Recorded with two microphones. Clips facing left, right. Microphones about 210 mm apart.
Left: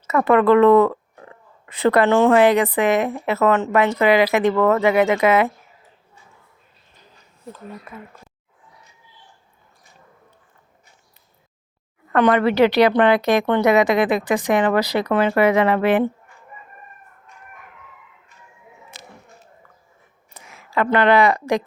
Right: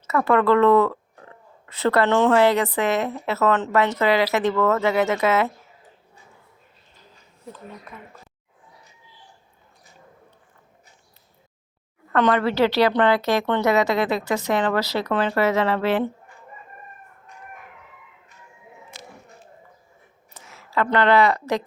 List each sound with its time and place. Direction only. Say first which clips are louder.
0.1 s a woman's voice: left 4 dB; 20° left (ahead or behind)
7.9 s a woman's voice: left 4 dB; 5° left (ahead or behind)
12.1 s a woman's voice: left 4 dB; 15° left (ahead or behind)
20.3 s speech: left 2 dB; 15° left (ahead or behind)